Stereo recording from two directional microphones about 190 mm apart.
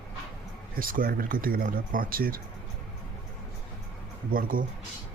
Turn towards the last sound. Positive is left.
turn(degrees=-50)  # may be behind; listen again after turning